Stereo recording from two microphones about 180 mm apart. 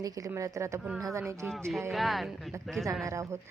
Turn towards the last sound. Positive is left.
turn(degrees=-15)  # may be behind; listen again after turning